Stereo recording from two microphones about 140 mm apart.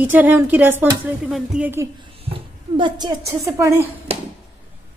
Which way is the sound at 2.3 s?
35° right (ahead or behind).